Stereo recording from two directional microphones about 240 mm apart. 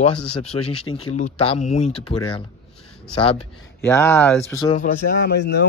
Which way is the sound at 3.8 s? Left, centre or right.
Centre.